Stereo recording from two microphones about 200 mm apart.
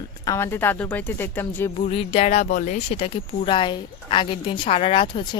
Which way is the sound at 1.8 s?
30° left (ahead or behind).